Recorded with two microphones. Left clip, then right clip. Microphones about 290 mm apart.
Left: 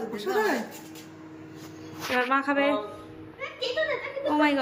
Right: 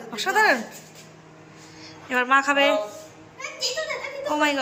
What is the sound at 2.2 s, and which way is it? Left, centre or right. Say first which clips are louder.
Speech: right 6 dB; centre.